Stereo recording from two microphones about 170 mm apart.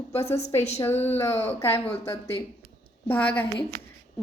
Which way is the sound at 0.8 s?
15° left (ahead or behind).